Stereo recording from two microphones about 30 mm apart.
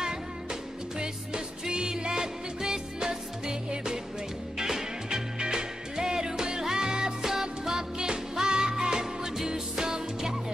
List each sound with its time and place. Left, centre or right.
0.0 s music: right